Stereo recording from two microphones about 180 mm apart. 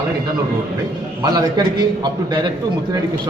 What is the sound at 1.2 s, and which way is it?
A man's voice, 20° right (ahead or behind).